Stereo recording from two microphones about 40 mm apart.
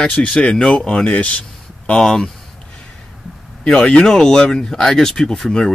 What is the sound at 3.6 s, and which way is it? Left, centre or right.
Speech, left.